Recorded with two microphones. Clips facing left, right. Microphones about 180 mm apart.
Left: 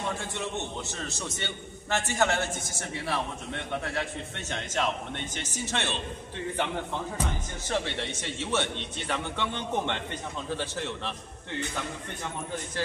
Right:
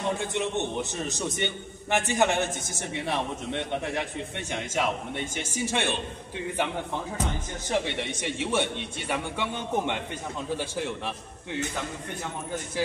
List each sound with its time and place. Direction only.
0.2 s a man's voice: 20° right (ahead or behind)
7.7 s a man's voice: 15° right (ahead or behind)